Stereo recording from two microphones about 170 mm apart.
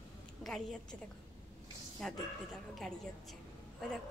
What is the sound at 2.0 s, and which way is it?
A woman's voice, centre (ahead or behind).